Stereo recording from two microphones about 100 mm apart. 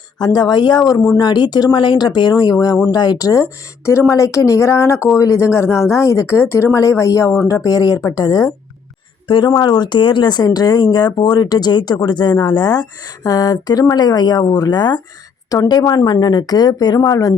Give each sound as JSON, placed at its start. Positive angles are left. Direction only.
{"t": 0.3, "sound": "speech", "side_deg": 45}
{"t": 9.2, "sound": "a woman's voice", "side_deg": 50}